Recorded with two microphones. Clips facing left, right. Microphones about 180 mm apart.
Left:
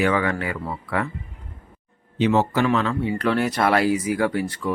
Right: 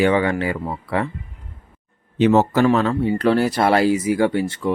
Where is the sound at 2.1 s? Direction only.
45° right (ahead or behind).